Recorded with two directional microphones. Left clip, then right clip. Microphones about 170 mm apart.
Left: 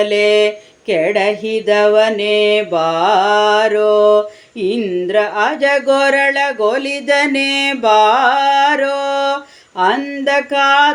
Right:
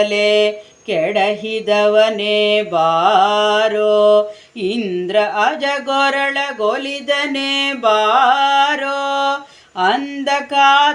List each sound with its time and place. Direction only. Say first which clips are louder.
0.0 s speech: left 2 dB; 10° left (ahead or behind)